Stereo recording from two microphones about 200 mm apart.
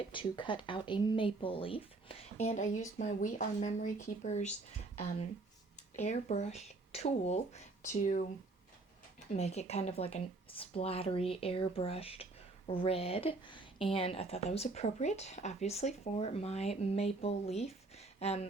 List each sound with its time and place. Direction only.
0.1 s speech: 25° left (ahead or behind)
6.0 s speech: 35° left (ahead or behind)
9.3 s speech: 35° left (ahead or behind)